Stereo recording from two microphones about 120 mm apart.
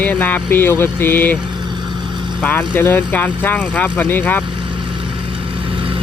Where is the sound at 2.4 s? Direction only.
15° left (ahead or behind).